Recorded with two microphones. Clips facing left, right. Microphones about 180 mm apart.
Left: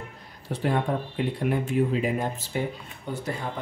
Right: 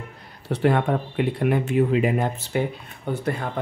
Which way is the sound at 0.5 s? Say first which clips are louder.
Right 5 dB; 70° right (ahead or behind).